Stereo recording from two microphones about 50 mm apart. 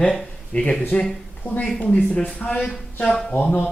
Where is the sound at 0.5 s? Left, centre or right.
Left.